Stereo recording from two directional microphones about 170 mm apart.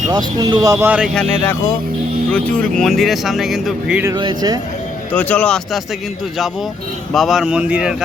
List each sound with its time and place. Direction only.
0.1 s speech: 25° right (ahead or behind); by 1.1 s 10° right (ahead or behind)
1.1 s speech: 10° left (ahead or behind)
4.0 s speech: 25° right (ahead or behind)
5.1 s speech: 10° left (ahead or behind)
7.1 s speech: centre (ahead or behind)